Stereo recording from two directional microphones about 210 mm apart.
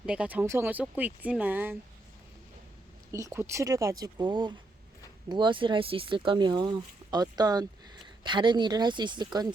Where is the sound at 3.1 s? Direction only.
15° right (ahead or behind).